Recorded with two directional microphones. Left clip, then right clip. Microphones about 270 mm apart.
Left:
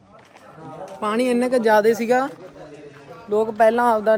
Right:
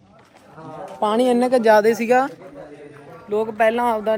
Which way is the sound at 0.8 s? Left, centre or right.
Centre.